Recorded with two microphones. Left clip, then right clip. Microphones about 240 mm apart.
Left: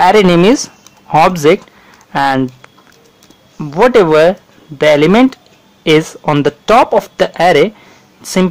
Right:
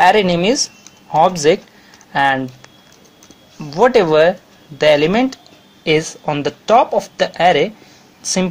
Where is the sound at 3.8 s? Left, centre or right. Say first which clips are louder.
Left 4 dB; left.